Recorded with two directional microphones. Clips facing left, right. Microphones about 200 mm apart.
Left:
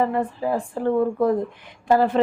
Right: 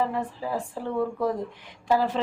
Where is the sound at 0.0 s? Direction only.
55° left (ahead or behind).